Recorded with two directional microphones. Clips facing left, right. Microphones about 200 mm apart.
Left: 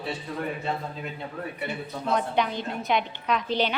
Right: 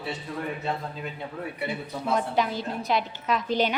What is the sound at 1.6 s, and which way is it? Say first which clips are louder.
A woman's voice: right 1 dB; 5° right (ahead or behind).